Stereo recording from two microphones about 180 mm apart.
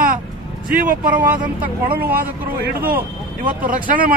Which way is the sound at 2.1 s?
55° right (ahead or behind).